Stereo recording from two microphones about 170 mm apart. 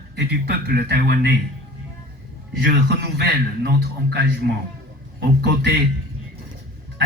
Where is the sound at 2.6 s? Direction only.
70° right (ahead or behind).